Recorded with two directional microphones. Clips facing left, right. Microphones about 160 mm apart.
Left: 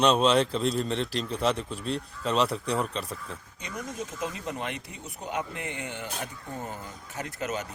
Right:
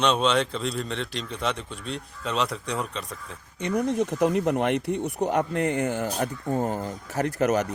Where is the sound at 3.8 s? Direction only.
70° right (ahead or behind).